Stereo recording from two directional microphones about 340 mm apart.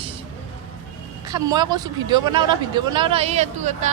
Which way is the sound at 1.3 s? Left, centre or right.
Centre.